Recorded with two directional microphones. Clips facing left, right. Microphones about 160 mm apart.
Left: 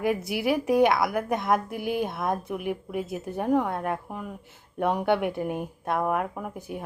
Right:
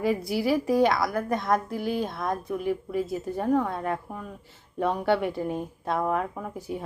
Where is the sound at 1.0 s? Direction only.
20° left (ahead or behind).